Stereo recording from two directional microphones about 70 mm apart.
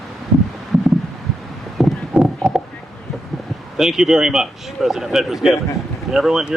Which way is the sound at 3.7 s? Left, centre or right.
Centre.